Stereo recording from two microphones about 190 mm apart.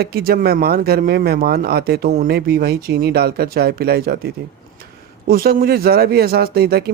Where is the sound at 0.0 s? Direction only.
55° right (ahead or behind).